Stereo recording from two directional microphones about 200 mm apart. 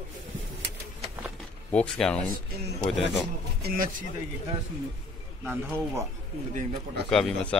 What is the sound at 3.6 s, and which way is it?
Speech, 45° right (ahead or behind).